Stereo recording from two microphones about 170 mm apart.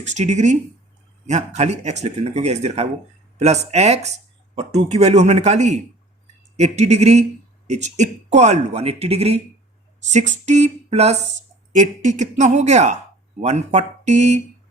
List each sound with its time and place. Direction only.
0.0 s speech: 45° right (ahead or behind)